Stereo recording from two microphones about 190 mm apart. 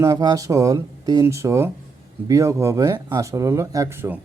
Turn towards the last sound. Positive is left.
turn(degrees=-10)  # may be behind; listen again after turning